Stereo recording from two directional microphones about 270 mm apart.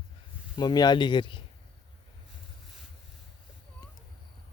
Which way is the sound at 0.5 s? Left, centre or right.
Centre.